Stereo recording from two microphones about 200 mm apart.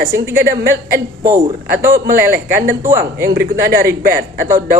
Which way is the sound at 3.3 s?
50° right (ahead or behind).